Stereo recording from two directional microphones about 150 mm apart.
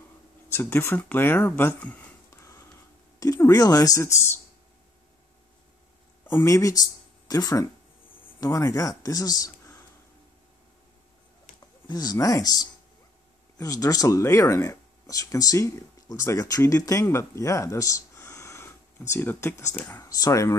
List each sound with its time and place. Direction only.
0.5 s speech: 15° left (ahead or behind)
6.2 s speech: 20° left (ahead or behind)
11.9 s speech: 25° left (ahead or behind)